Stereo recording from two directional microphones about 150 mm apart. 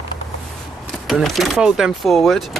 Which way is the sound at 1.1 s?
Centre (ahead or behind).